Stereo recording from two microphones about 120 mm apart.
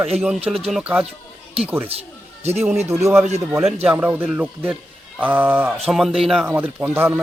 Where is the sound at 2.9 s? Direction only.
25° right (ahead or behind).